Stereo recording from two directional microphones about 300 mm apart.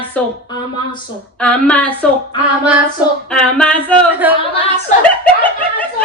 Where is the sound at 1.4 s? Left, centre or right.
Centre.